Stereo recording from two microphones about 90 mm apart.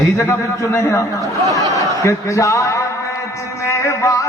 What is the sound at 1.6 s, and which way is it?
Chuckle, 35° right (ahead or behind).